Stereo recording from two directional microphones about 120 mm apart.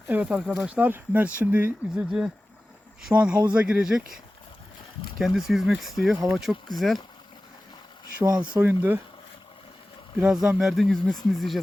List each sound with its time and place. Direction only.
0.1 s speech: 10° right (ahead or behind)
8.6 s speech: 15° right (ahead or behind)
10.2 s speech: 5° right (ahead or behind)